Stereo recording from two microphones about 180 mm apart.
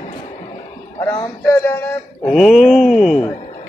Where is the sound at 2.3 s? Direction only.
Centre (ahead or behind).